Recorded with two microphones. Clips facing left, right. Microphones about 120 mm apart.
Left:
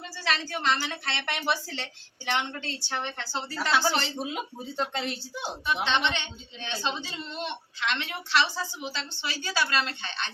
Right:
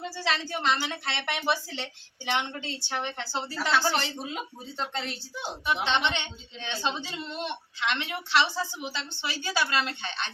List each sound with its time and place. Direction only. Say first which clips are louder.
0.0 s a woman's voice: right 1 dB; 20° right (ahead or behind)
3.7 s speech: even; 10° left (ahead or behind)
5.8 s a woman's voice: left 1 dB; 15° right (ahead or behind)